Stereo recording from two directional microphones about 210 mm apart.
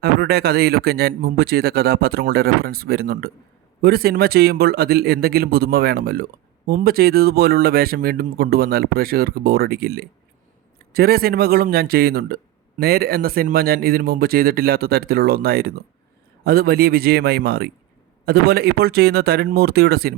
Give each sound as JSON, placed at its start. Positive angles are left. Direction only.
{"t": 0.0, "sound": "speech", "side_deg": -50}